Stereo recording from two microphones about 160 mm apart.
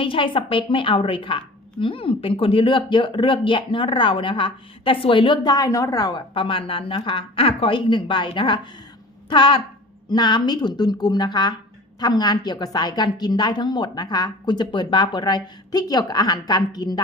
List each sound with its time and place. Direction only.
0.0 s a woman's voice: 35° left (ahead or behind)